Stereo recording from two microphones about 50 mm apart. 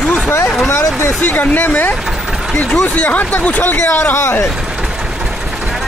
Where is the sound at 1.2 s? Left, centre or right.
Left.